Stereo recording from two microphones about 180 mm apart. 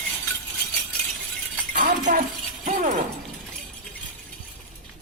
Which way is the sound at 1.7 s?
45° right (ahead or behind).